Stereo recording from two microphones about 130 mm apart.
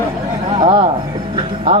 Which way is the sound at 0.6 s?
40° right (ahead or behind).